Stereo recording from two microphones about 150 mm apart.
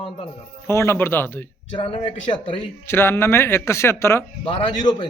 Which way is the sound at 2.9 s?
15° left (ahead or behind).